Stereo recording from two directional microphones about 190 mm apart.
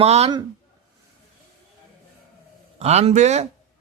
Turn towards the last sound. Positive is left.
turn(degrees=-40)  # may be behind; listen again after turning